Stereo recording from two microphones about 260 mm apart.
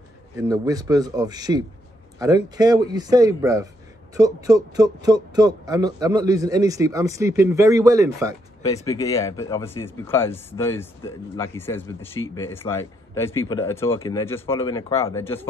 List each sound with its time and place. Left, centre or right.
0.4 s speech: centre
8.6 s speech: centre